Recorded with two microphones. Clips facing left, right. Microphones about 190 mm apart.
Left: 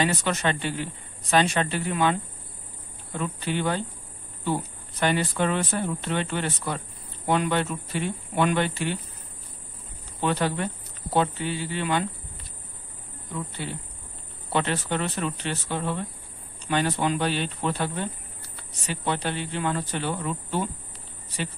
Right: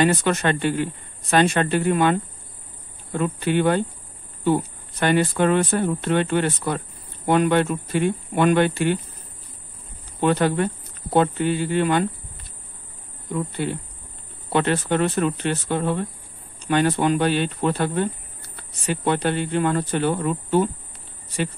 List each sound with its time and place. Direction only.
0.0 s speech: 55° right (ahead or behind)
3.2 s speech: 60° right (ahead or behind)
5.0 s speech: 55° right (ahead or behind)
10.2 s speech: 50° right (ahead or behind)
14.5 s speech: 55° right (ahead or behind)